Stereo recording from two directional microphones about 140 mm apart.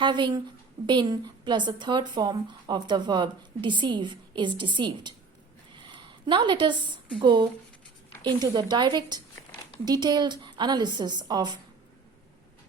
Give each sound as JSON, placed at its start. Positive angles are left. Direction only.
{"t": 0.0, "sound": "a woman's voice", "side_deg": -35}